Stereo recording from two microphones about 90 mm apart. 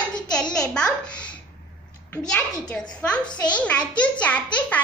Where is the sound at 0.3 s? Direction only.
10° left (ahead or behind).